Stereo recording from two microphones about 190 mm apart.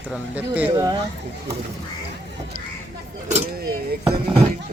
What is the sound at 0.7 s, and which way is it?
Speech, 20° right (ahead or behind).